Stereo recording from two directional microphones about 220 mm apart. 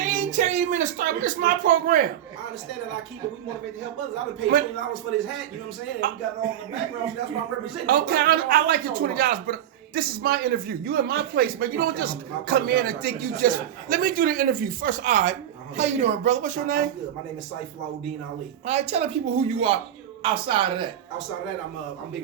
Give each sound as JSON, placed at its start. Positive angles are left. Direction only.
{"t": 0.0, "sound": "a woman's voice", "side_deg": -35}
{"t": 6.0, "sound": "speech", "side_deg": -40}
{"t": 7.9, "sound": "a man's voice", "side_deg": -40}
{"t": 18.6, "sound": "speech", "side_deg": -30}